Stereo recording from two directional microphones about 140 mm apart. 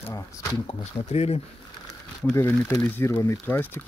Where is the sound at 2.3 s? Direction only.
15° left (ahead or behind).